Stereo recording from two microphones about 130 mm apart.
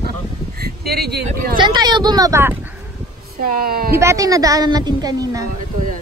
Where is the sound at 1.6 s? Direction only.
35° right (ahead or behind).